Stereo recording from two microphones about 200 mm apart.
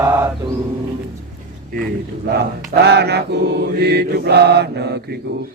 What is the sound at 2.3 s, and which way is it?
Mantra, 55° right (ahead or behind).